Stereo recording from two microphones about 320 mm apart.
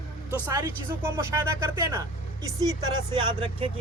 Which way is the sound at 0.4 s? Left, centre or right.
Centre.